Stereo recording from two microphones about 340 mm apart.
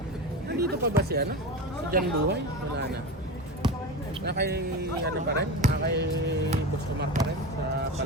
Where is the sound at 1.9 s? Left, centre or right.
Right.